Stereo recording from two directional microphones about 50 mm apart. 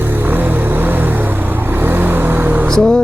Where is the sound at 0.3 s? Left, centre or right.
Right.